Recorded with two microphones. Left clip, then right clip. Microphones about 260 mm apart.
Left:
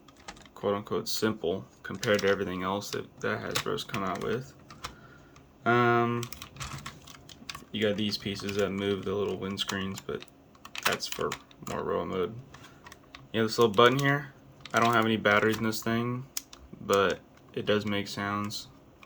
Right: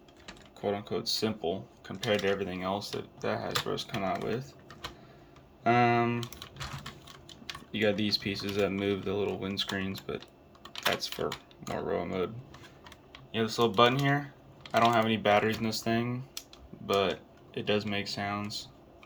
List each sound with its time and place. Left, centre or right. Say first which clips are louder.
0.3 s speech: left 3 dB; centre
7.7 s speech: right 1 dB; centre
13.3 s speech: left 3 dB; centre